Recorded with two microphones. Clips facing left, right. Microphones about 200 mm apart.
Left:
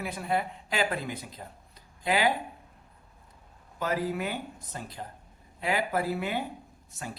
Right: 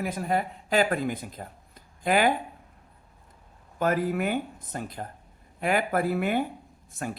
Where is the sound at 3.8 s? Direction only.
50° right (ahead or behind).